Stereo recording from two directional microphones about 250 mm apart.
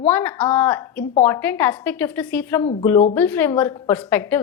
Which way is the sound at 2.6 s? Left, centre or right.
Left.